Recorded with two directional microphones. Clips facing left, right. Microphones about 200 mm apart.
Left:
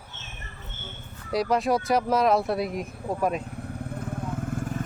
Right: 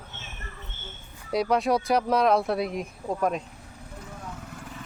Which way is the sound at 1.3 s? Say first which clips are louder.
Even; centre (ahead or behind).